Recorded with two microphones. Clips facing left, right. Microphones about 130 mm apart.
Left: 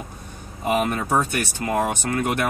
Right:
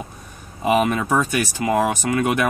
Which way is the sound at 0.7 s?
90° right.